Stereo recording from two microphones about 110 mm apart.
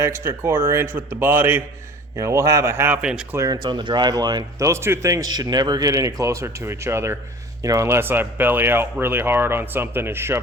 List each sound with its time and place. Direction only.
0.0 s speech: 25° right (ahead or behind)
3.0 s speech: 5° right (ahead or behind)
3.3 s speech: 30° right (ahead or behind)
3.6 s speech: 45° right (ahead or behind); by 10.4 s 20° right (ahead or behind)